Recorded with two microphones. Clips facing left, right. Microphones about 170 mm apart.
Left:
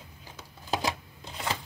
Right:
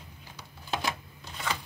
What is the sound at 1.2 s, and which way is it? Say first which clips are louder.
Shuffling cards: left 1 dB; 25° left (ahead or behind).